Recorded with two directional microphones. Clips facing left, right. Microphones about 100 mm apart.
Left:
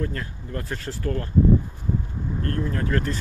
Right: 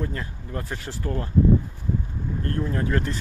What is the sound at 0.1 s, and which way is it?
Speech, 15° right (ahead or behind).